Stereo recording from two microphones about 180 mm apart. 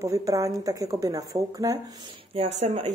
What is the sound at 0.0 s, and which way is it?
Speech, 20° right (ahead or behind).